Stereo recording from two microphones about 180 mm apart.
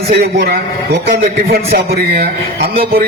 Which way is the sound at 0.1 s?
55° right (ahead or behind).